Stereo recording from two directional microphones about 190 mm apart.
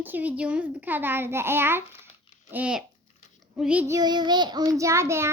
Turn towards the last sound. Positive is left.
turn(degrees=-15)  # may be behind; listen again after turning